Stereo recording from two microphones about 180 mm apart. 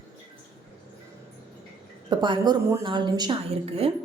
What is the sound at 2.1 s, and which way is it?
A woman's voice, 25° right (ahead or behind).